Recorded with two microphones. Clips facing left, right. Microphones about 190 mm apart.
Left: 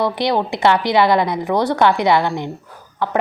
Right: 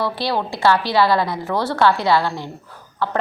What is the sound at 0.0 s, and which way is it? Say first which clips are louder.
A woman's voice: left 4 dB; 20° left (ahead or behind).